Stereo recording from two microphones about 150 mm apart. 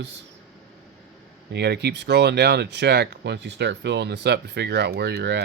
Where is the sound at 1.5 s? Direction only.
90° right.